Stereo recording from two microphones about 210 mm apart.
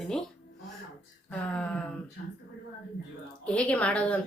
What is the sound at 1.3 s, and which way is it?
Speech, 5° left (ahead or behind).